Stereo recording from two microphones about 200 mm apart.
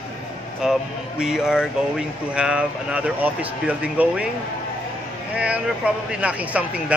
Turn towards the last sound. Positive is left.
turn(degrees=-5)  # may be behind; listen again after turning